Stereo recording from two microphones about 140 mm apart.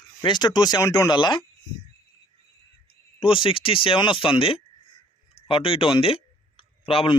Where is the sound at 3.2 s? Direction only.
40° left (ahead or behind).